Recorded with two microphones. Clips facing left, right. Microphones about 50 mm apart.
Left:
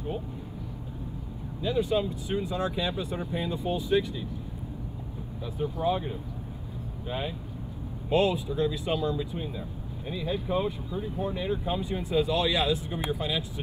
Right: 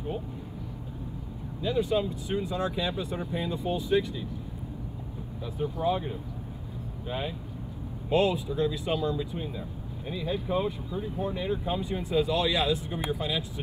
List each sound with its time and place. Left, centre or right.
1.6 s speech: centre
5.4 s speech: centre
7.1 s speech: centre
11.0 s speech: centre
11.3 s speech: left